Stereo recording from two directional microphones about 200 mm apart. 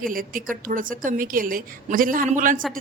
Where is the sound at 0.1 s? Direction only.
45° right (ahead or behind).